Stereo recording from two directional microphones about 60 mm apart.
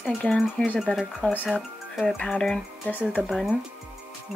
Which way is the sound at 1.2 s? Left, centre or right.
Left.